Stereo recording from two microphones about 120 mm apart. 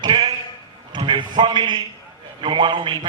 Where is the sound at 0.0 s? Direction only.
40° right (ahead or behind).